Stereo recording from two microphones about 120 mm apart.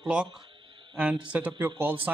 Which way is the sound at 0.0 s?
5° right (ahead or behind).